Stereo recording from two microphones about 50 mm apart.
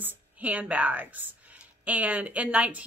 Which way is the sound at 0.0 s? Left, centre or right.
Right.